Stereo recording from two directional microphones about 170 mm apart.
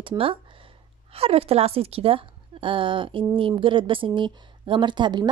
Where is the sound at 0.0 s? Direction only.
30° right (ahead or behind).